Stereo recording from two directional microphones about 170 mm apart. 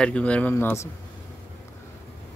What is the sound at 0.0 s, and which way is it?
Speech, 5° left (ahead or behind).